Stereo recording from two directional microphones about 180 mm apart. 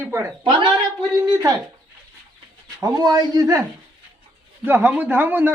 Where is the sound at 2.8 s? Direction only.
20° right (ahead or behind).